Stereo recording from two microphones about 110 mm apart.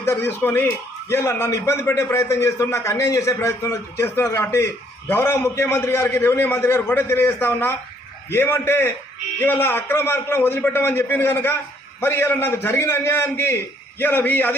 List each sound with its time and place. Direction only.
0.0 s a man's voice: 25° left (ahead or behind)